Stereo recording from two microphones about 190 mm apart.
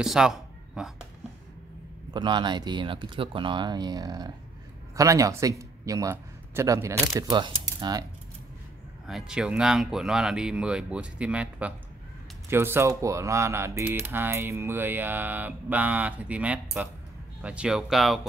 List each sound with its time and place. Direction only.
0.0 s speech: centre (ahead or behind)
2.1 s speech: 25° right (ahead or behind)
9.0 s speech: 5° right (ahead or behind)